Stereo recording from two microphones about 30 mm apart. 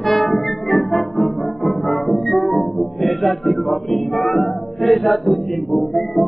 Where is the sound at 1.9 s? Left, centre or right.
Centre.